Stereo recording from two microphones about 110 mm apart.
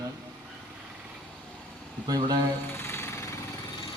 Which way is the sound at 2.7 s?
20° left (ahead or behind).